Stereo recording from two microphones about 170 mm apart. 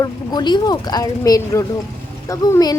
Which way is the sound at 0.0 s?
25° left (ahead or behind).